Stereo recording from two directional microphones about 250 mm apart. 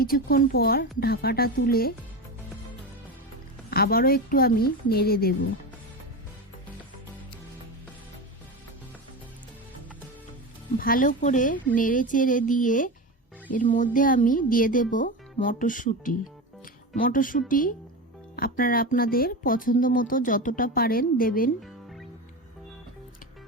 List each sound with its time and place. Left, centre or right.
0.0 s speech: left
3.7 s speech: left
10.8 s speech: left